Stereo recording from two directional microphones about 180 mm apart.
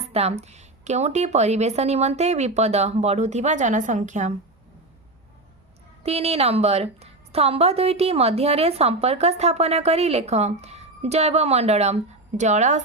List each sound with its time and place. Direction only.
0.0 s a woman's voice: 35° right (ahead or behind)
6.0 s a woman's voice: 35° right (ahead or behind)